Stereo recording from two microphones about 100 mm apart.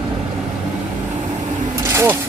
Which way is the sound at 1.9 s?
25° right (ahead or behind).